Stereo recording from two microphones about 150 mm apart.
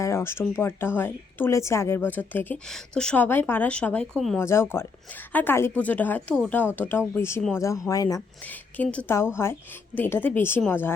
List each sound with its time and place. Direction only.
0.0 s speech: 15° left (ahead or behind)
8.8 s speech: 10° left (ahead or behind)